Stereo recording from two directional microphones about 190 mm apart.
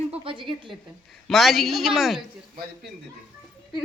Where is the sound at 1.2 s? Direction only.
Centre (ahead or behind).